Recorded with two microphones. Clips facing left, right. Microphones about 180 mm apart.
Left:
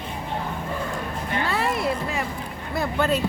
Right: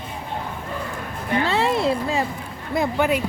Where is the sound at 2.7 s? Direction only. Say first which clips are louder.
Right 3 dB; 15° right (ahead or behind).